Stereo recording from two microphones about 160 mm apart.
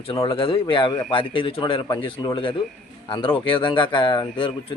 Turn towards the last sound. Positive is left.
turn(degrees=30)  # may be behind; listen again after turning